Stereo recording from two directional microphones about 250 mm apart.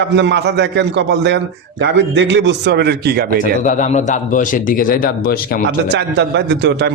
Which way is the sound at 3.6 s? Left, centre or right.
Left.